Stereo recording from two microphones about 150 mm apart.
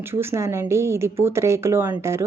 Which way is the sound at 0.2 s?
20° right (ahead or behind).